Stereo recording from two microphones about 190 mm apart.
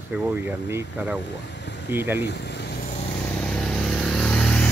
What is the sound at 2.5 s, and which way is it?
Vehicle, 60° left (ahead or behind).